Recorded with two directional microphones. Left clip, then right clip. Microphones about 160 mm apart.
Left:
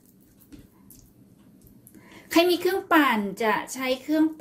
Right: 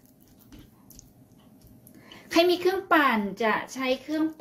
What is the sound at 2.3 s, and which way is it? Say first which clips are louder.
Speech: left 1 dB; 15° left (ahead or behind).